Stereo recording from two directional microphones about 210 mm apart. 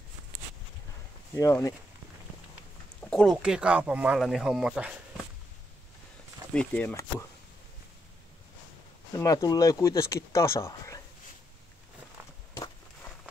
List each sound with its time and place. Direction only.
1.3 s speech: 15° left (ahead or behind)
3.0 s speech: 5° left (ahead or behind)
6.5 s speech: 5° left (ahead or behind)
9.1 s speech: 15° left (ahead or behind)